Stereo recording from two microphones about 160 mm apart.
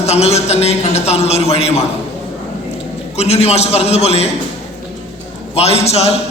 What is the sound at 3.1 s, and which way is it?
A man's voice, 40° left (ahead or behind).